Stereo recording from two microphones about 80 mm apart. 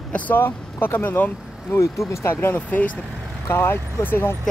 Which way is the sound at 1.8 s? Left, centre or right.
Left.